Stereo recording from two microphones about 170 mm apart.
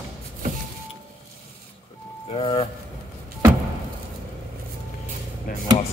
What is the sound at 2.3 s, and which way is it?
Vehicle, 35° left (ahead or behind).